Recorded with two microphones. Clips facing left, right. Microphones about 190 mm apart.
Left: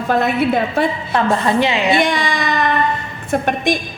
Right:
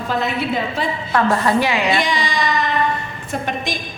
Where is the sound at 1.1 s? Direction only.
20° left (ahead or behind).